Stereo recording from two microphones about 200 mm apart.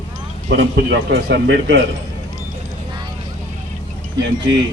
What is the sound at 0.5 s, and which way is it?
A man's voice, 65° right (ahead or behind).